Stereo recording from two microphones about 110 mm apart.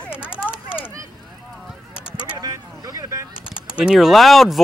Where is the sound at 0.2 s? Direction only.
10° right (ahead or behind).